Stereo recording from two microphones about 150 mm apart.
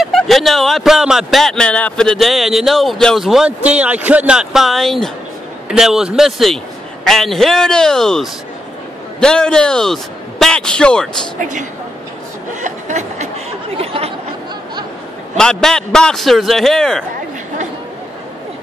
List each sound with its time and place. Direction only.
0.0 s speech: 5° left (ahead or behind)
11.3 s speech: 55° right (ahead or behind)
12.6 s chuckle: 50° right (ahead or behind)
13.7 s a sound: 40° right (ahead or behind)
15.3 s speech: 5° left (ahead or behind)